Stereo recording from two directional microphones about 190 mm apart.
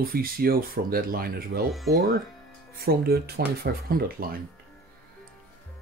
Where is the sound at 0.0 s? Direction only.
50° right (ahead or behind).